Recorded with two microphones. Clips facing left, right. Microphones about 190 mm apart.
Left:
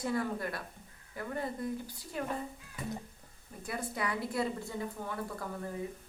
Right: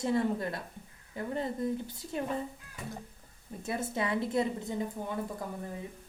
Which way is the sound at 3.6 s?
25° right (ahead or behind).